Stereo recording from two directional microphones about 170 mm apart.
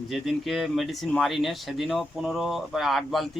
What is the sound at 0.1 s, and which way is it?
Speech, centre (ahead or behind).